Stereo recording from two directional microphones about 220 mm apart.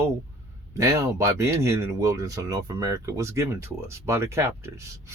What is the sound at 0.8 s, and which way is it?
Speech, 15° right (ahead or behind).